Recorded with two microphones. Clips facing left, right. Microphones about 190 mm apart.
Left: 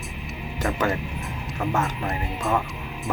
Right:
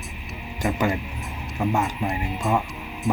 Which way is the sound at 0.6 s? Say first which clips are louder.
Right 1 dB; 15° right (ahead or behind).